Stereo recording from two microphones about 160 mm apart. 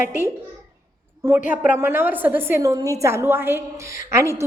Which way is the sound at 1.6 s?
10° right (ahead or behind).